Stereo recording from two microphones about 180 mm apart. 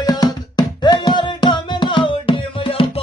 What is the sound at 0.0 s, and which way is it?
Music, 20° left (ahead or behind).